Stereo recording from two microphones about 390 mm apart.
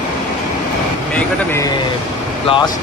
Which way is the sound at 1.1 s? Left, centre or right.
Centre.